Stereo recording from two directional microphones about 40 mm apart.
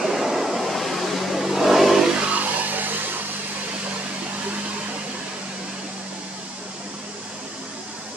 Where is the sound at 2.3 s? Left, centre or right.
Right.